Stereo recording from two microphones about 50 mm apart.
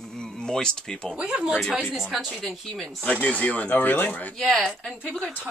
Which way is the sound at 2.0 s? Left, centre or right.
Centre.